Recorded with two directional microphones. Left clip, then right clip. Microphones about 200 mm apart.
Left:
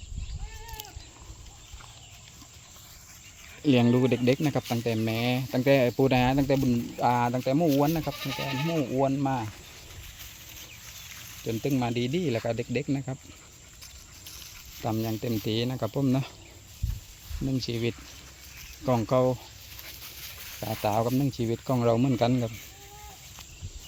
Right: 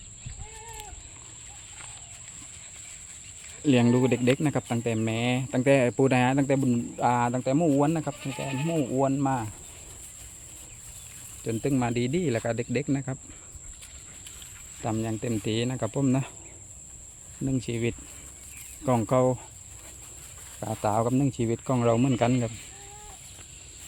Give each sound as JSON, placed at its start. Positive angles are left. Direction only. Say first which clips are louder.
{"t": 3.6, "sound": "speech", "louder": "even", "side_deg": 0}
{"t": 8.2, "sound": "speech", "louder": "left 1 dB", "side_deg": 45}
{"t": 8.8, "sound": "speech", "louder": "right 1 dB", "side_deg": 0}
{"t": 11.4, "sound": "speech", "louder": "right 1 dB", "side_deg": -5}
{"t": 14.8, "sound": "speech", "louder": "even", "side_deg": 0}
{"t": 17.7, "sound": "speech", "louder": "right 1 dB", "side_deg": 0}
{"t": 20.6, "sound": "speech", "louder": "right 1 dB", "side_deg": -5}